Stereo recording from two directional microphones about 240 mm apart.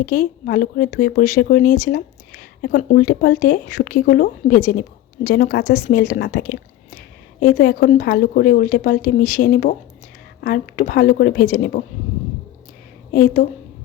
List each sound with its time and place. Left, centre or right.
0.0 s speech: left
13.1 s speech: left